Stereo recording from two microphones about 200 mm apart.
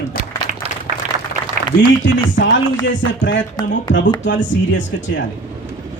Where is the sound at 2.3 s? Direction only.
65° left (ahead or behind).